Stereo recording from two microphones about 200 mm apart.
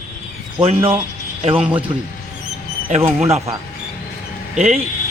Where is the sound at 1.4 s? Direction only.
25° right (ahead or behind).